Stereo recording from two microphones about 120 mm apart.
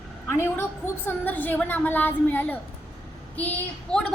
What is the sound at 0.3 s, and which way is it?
A woman's voice, 20° left (ahead or behind).